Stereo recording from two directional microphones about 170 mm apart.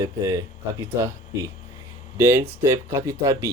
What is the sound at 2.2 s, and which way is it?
Speech, 15° right (ahead or behind).